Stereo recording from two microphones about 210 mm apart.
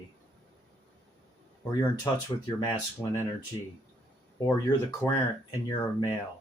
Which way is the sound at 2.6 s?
15° left (ahead or behind).